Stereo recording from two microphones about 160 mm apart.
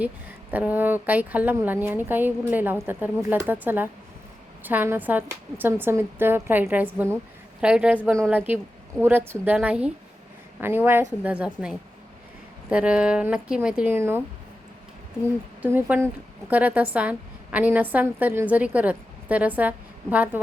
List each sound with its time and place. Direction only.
0.0 s a woman's voice: 10° right (ahead or behind)
15.6 s a woman's voice: 10° right (ahead or behind)